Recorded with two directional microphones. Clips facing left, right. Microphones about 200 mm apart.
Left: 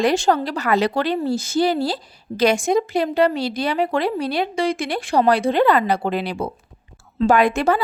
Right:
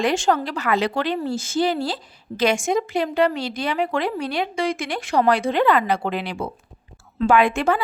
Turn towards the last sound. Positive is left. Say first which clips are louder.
# left 1 dB
turn(degrees=40)  # may be behind; listen again after turning